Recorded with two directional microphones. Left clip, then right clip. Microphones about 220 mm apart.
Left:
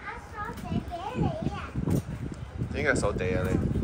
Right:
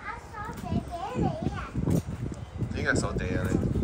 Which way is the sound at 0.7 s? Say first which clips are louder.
Right 4 dB; 5° right (ahead or behind).